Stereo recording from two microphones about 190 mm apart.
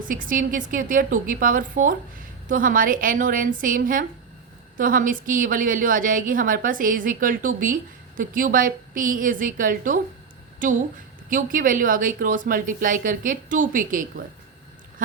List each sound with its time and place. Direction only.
0.1 s a woman's voice: 45° right (ahead or behind)